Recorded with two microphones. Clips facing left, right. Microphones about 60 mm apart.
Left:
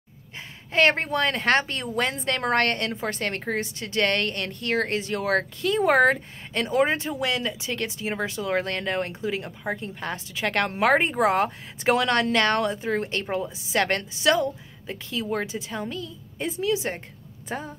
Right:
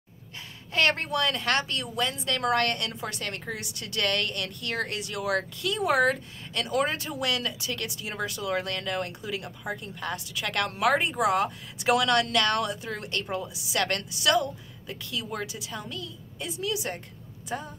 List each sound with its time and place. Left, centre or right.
0.7 s a woman's voice: left